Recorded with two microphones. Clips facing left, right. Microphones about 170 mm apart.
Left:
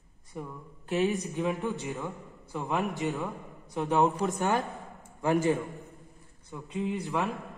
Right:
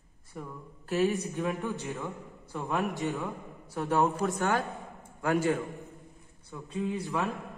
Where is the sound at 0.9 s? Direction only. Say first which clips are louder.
Even; 15° left (ahead or behind).